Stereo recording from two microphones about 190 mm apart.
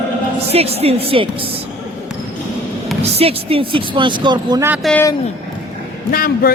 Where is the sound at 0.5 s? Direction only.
30° right (ahead or behind).